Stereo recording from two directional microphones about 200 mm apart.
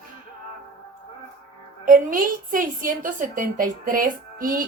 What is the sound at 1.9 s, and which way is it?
A woman's voice, 45° right (ahead or behind).